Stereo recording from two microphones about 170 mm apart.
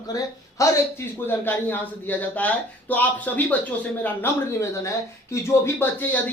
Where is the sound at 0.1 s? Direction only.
20° left (ahead or behind).